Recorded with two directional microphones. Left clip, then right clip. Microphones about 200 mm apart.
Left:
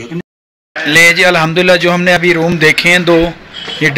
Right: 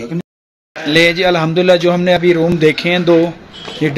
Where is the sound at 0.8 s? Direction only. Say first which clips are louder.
Left 5 dB; 5° right (ahead or behind).